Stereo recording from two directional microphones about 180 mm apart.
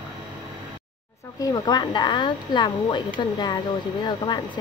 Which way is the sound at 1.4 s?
25° left (ahead or behind).